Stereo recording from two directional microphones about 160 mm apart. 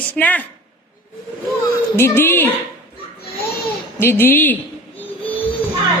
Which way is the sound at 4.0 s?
15° left (ahead or behind).